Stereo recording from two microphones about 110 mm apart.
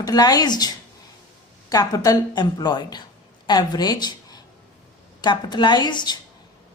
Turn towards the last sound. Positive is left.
turn(degrees=40)  # may be behind; listen again after turning